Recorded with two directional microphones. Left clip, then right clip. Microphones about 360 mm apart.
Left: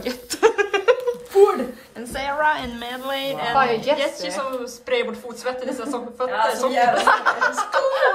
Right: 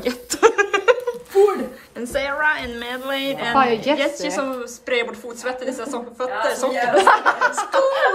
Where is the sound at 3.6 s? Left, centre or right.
Centre.